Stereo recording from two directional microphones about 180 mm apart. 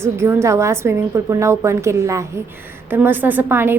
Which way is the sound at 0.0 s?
15° right (ahead or behind).